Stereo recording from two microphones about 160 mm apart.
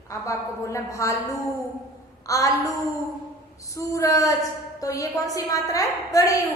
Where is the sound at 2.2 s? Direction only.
20° left (ahead or behind).